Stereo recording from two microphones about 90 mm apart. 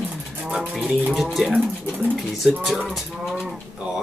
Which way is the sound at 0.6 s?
15° right (ahead or behind).